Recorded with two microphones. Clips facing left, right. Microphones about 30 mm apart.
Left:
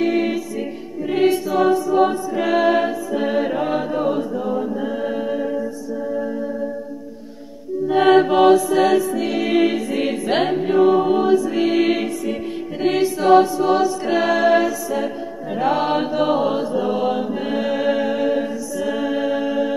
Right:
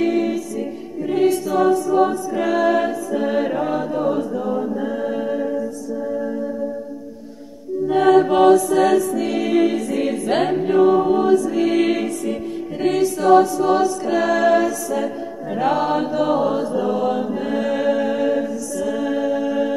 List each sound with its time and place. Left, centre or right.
1.0 s choir: left
7.9 s mantra: left
8.3 s music: centre
9.5 s choir: left
12.8 s chant: left
13.7 s choir: centre
14.0 s a capella: left
15.5 s chant: centre
18.4 s music: left